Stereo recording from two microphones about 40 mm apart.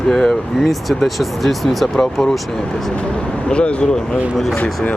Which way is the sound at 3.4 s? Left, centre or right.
Left.